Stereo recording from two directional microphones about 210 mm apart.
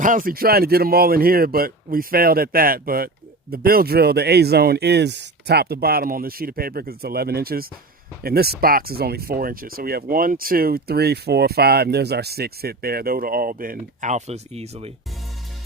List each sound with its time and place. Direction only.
0.0 s speech: 40° right (ahead or behind)